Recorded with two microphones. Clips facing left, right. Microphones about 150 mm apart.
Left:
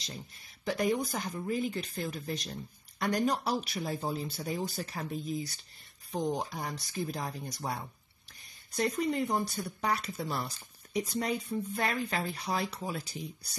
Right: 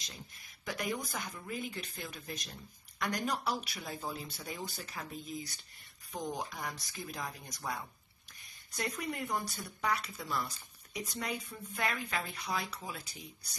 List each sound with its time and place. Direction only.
0.7 s speech: 30° left (ahead or behind)